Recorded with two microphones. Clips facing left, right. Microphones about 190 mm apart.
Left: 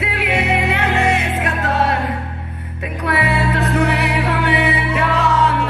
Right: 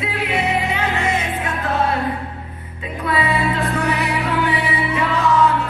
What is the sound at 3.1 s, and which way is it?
Music, 70° left (ahead or behind).